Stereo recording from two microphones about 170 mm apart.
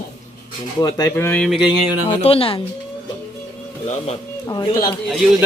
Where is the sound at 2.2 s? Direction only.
35° left (ahead or behind).